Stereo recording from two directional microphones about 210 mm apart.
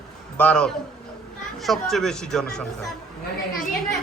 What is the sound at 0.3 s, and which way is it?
Speech, 5° left (ahead or behind).